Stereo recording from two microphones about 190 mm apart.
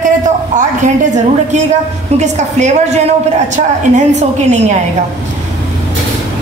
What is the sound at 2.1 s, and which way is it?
A woman's voice, 35° right (ahead or behind).